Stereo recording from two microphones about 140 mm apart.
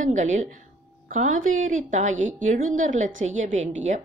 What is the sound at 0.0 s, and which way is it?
A woman's voice, 60° right (ahead or behind).